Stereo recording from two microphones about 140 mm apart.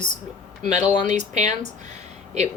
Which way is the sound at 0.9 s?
55° right (ahead or behind).